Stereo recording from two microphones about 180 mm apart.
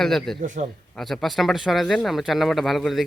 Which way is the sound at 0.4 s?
45° right (ahead or behind).